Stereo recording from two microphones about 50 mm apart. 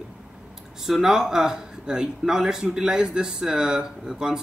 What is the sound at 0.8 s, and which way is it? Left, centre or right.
Speech, centre.